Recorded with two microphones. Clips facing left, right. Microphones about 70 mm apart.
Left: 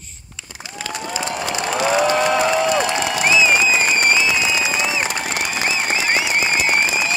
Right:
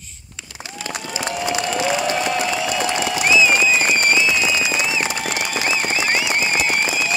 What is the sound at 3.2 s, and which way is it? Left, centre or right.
Applause, left.